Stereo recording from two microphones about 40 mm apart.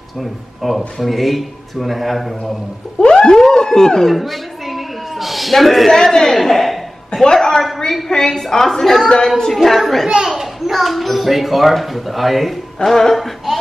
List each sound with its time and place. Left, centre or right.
0.2 s speech: centre
3.1 s a sound: centre
4.1 s a man's voice: centre
5.9 s a woman's voice: centre
7.1 s a sound: centre
7.3 s a woman's voice: centre
10.0 s speech: centre
10.3 s speech: centre
12.8 s music: centre